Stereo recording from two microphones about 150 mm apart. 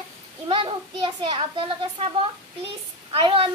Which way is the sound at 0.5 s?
35° right (ahead or behind).